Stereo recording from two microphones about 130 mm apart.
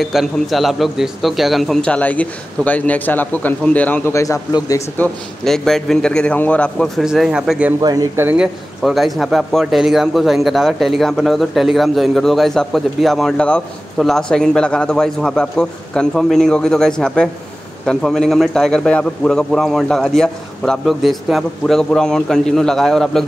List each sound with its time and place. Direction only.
0.0 s a man's voice: centre (ahead or behind); by 4.8 s 30° left (ahead or behind)
4.9 s a man's voice: 5° left (ahead or behind)
7.8 s speech: 30° right (ahead or behind)
8.2 s speech: 15° right (ahead or behind)
8.8 s a man's voice: centre (ahead or behind)